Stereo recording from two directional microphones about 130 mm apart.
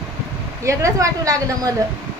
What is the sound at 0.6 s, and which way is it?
Speech, 25° right (ahead or behind).